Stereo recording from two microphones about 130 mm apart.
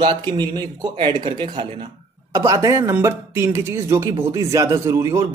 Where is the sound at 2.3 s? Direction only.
25° right (ahead or behind).